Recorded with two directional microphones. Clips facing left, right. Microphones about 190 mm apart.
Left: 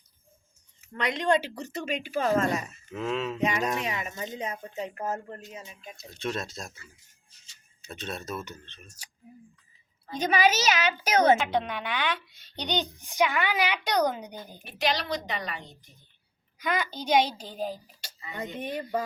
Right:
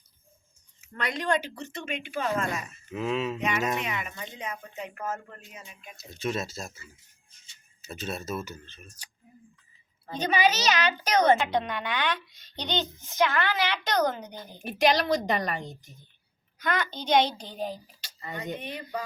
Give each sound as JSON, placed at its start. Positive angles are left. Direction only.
{"t": 0.9, "sound": "speech", "side_deg": 20}
{"t": 2.9, "sound": "speech", "side_deg": -5}
{"t": 4.1, "sound": "speech", "side_deg": 40}
{"t": 6.0, "sound": "speech", "side_deg": -5}
{"t": 7.8, "sound": "speech", "side_deg": -5}
{"t": 10.2, "sound": "a child's voice", "side_deg": 10}
{"t": 14.6, "sound": "a woman's voice", "side_deg": -50}
{"t": 16.6, "sound": "a child's voice", "side_deg": 10}
{"t": 18.6, "sound": "speech", "side_deg": 45}